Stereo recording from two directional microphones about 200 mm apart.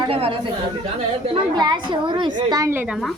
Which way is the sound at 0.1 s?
30° right (ahead or behind).